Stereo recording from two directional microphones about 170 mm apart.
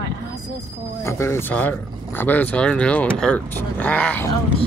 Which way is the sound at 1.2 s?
10° left (ahead or behind).